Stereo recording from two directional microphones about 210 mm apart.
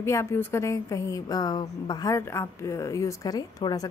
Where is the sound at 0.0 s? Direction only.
10° left (ahead or behind).